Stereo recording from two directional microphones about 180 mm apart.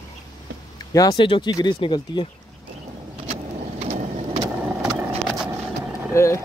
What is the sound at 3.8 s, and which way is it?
Vehicle, 40° right (ahead or behind).